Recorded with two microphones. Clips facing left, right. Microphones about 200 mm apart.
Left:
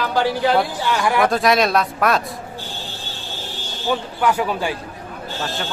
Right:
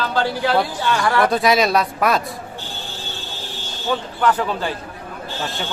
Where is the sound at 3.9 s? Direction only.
10° left (ahead or behind).